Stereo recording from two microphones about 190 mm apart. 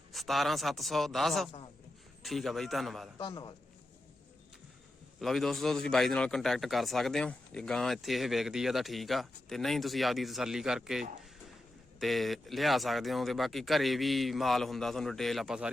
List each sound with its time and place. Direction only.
0.1 s a man's voice: centre (ahead or behind)
3.2 s a man's voice: 25° left (ahead or behind)
5.2 s a man's voice: centre (ahead or behind)